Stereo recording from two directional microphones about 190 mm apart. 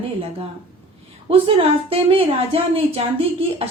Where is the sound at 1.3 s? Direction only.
30° right (ahead or behind).